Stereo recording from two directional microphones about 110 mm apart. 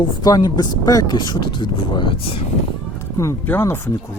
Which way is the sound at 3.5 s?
20° left (ahead or behind).